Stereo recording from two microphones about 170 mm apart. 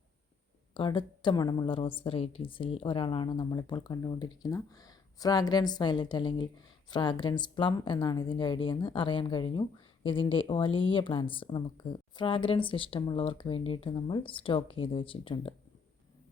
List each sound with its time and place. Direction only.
0.7 s a woman's voice: 30° left (ahead or behind)